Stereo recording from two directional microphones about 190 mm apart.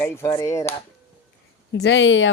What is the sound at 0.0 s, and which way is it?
Speech, 15° left (ahead or behind).